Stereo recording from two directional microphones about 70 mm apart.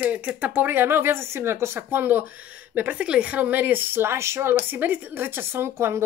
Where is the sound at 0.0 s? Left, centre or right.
Right.